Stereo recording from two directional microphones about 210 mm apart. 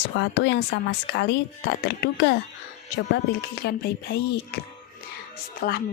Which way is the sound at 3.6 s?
55° left (ahead or behind).